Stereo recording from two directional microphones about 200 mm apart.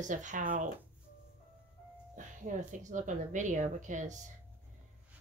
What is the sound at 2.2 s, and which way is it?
A woman's voice, 40° right (ahead or behind).